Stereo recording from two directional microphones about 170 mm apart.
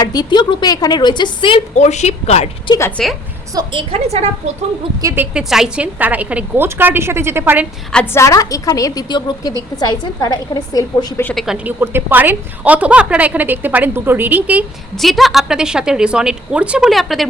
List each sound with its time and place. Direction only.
0.0 s a woman's voice: 25° left (ahead or behind)
1.7 s a woman's voice: 45° left (ahead or behind)
3.0 s a woman's voice: 5° left (ahead or behind)
3.5 s a woman's voice: 25° right (ahead or behind)
5.0 s a woman's voice: 10° right (ahead or behind)
7.9 s a woman's voice: 15° left (ahead or behind)
11.2 s speech: 10° left (ahead or behind)
11.4 s a woman's voice: 10° right (ahead or behind)